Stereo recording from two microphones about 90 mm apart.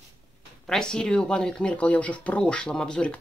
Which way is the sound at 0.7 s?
10° left (ahead or behind).